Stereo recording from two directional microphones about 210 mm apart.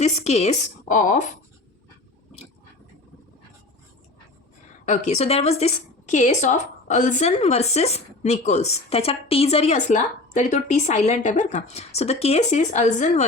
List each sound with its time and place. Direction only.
0.0 s a woman's voice: 30° left (ahead or behind)
4.9 s a woman's voice: 30° left (ahead or behind)